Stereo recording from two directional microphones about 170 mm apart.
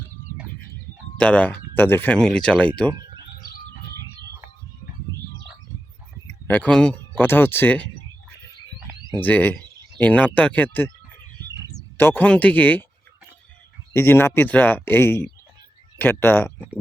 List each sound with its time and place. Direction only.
1.2 s speech: 10° left (ahead or behind)
6.5 s speech: 5° left (ahead or behind)
9.2 s speech: 10° left (ahead or behind)
11.9 s speech: 10° left (ahead or behind)
13.9 s speech: 15° left (ahead or behind)